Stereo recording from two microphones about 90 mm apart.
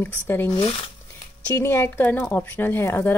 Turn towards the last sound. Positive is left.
turn(degrees=25)  # may be behind; listen again after turning